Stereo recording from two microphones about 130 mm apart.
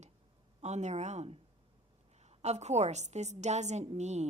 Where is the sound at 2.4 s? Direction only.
60° right (ahead or behind).